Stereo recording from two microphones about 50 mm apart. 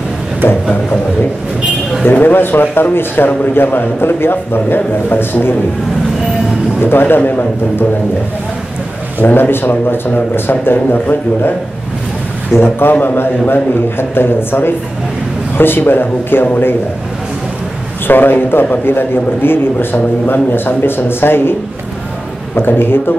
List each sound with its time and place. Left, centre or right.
2.0 s a man's voice: left
6.8 s a man's voice: left
9.2 s a man's voice: left
12.5 s a man's voice: left
18.0 s a man's voice: left
22.6 s a man's voice: left